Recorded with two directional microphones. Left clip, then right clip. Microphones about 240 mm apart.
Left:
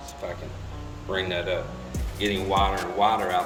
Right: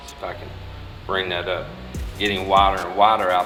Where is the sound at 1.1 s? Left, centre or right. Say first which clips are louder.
Right 4 dB; centre.